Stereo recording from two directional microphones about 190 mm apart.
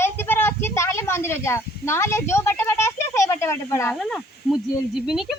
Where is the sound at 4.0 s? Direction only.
Centre (ahead or behind).